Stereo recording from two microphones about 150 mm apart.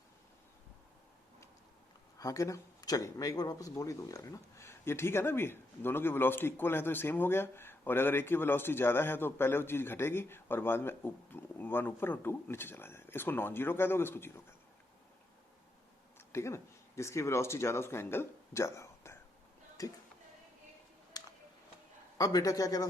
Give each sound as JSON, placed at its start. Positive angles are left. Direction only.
{"t": 2.1, "sound": "speech", "side_deg": 20}
{"t": 16.1, "sound": "a man's voice", "side_deg": 20}
{"t": 21.2, "sound": "a sound", "side_deg": 25}
{"t": 22.2, "sound": "a man's voice", "side_deg": 25}